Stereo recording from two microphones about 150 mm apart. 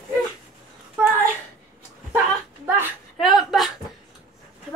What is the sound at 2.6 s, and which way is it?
Speech, 10° right (ahead or behind).